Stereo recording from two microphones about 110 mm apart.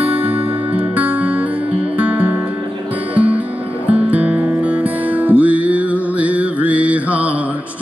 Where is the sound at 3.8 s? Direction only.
15° right (ahead or behind).